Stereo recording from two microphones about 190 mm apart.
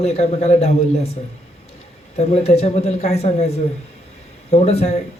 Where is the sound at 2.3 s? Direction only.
35° left (ahead or behind).